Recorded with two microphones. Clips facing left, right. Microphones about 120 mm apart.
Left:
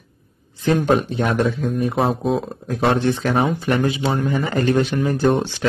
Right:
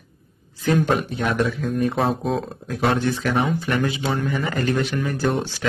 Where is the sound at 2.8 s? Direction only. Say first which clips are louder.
Left 3 dB; 30° left (ahead or behind).